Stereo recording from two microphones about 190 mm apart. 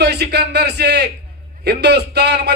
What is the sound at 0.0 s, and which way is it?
A man's voice, 60° right (ahead or behind).